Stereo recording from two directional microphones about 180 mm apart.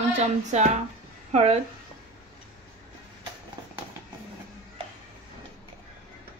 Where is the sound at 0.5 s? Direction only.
40° right (ahead or behind).